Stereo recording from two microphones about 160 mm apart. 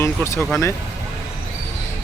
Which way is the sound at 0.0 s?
15° left (ahead or behind).